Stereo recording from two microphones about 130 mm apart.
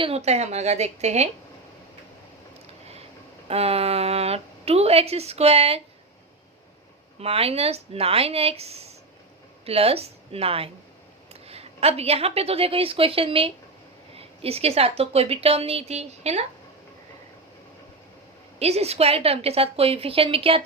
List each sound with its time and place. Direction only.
0.0 s a woman's voice: 55° right (ahead or behind)
3.5 s speech: 50° right (ahead or behind)
7.2 s speech: 50° right (ahead or behind)
18.6 s speech: 55° right (ahead or behind)